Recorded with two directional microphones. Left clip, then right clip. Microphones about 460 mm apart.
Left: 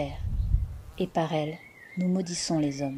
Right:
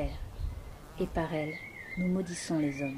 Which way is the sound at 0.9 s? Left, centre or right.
Centre.